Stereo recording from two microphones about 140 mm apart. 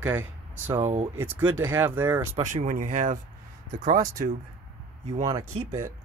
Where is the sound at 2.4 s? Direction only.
65° right (ahead or behind).